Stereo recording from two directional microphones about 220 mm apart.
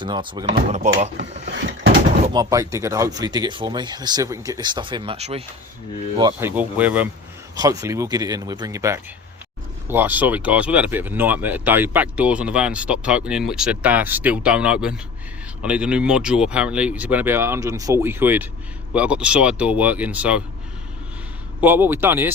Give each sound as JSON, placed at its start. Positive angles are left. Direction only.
{"t": 0.0, "sound": "speech", "side_deg": -20}
{"t": 2.2, "sound": "speech", "side_deg": -20}
{"t": 6.6, "sound": "speech", "side_deg": -5}
{"t": 21.6, "sound": "speech", "side_deg": -10}